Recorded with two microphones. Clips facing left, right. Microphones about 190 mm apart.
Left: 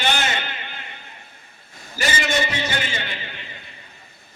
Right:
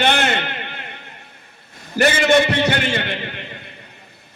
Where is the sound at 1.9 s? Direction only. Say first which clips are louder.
Right 9 dB; 60° right (ahead or behind).